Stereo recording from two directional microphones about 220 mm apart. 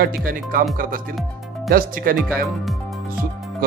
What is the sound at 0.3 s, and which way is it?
A man's voice, 40° right (ahead or behind).